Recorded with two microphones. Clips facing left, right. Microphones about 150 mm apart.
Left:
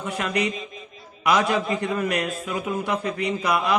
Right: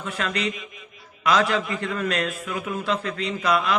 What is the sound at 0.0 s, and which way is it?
A man's voice, 20° left (ahead or behind).